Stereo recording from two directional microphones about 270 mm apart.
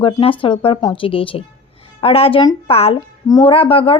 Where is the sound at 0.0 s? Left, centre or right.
Centre.